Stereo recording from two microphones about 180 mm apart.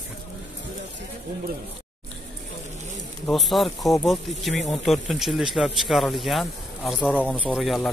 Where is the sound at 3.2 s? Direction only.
Centre (ahead or behind).